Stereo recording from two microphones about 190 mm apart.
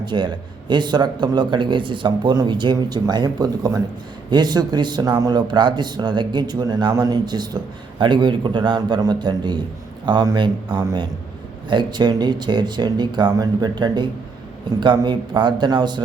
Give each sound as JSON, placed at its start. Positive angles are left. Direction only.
{"t": 0.0, "sound": "speech", "side_deg": -25}